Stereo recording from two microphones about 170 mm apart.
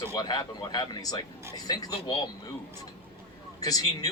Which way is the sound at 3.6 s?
20° left (ahead or behind).